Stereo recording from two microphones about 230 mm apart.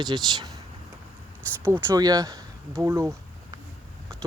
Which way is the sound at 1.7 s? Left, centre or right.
Centre.